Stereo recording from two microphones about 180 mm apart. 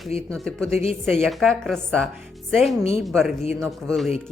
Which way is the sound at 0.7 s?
35° left (ahead or behind).